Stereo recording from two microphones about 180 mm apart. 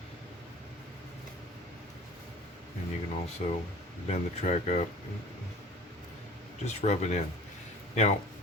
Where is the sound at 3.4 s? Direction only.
40° left (ahead or behind).